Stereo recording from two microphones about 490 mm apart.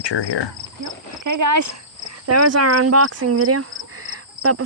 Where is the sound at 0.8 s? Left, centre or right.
Right.